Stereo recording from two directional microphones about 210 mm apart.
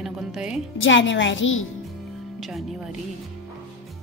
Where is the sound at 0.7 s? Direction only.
65° left (ahead or behind).